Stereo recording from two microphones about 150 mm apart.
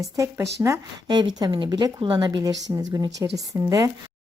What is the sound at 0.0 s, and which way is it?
Speech, 20° right (ahead or behind).